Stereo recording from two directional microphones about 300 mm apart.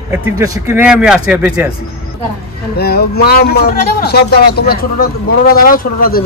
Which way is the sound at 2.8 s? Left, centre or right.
Left.